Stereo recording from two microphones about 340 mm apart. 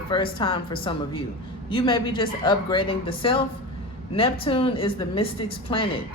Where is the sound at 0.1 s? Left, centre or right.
Centre.